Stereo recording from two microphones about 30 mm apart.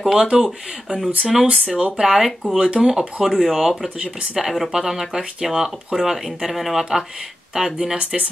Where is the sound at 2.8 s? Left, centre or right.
Centre.